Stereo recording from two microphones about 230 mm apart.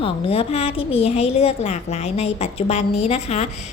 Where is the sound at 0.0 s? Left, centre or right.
Left.